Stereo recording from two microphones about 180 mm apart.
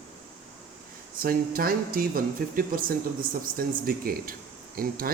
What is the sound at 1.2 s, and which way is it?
Speech, 55° right (ahead or behind).